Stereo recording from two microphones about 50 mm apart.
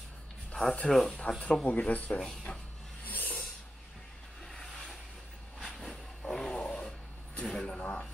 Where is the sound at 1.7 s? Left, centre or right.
Left.